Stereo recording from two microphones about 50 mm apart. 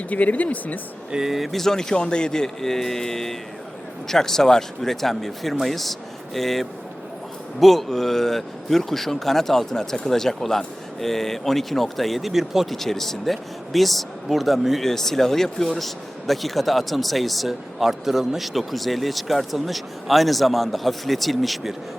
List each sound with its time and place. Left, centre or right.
0.1 s speech: left
1.1 s speech: centre
12.7 s speech: centre